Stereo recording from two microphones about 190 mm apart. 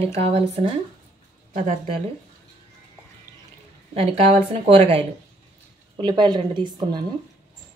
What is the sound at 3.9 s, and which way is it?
A woman's voice, 30° right (ahead or behind).